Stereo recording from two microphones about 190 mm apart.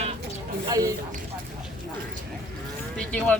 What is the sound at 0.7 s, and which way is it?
Speech, 20° right (ahead or behind).